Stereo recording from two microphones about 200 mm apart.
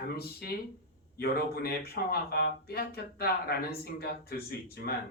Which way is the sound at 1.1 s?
50° left (ahead or behind).